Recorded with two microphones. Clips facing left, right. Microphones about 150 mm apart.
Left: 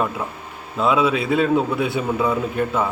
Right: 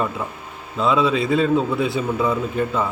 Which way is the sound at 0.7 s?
5° left (ahead or behind).